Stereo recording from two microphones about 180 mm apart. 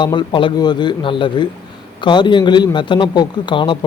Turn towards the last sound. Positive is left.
turn(degrees=25)  # may be behind; listen again after turning